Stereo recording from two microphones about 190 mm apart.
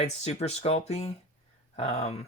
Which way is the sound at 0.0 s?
35° left (ahead or behind).